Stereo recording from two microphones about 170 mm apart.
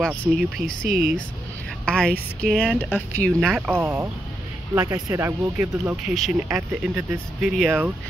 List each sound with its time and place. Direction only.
0.0 s speech: 10° left (ahead or behind)